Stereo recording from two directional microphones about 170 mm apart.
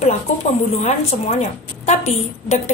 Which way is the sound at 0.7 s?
40° left (ahead or behind).